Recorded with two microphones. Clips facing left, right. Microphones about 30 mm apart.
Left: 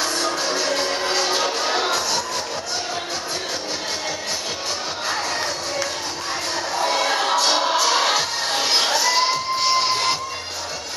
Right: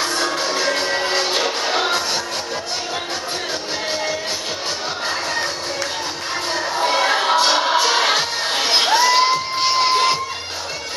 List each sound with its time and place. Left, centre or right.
0.0 s music: right
1.9 s music: right
6.5 s a sound: right
7.4 s music: right
9.8 s crowd: right